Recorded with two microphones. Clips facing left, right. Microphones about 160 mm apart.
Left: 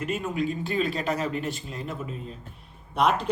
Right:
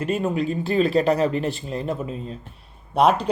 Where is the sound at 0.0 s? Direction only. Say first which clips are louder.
Right 5 dB; 35° right (ahead or behind).